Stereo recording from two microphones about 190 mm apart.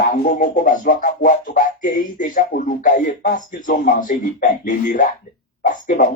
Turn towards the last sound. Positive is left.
turn(degrees=45)  # may be behind; listen again after turning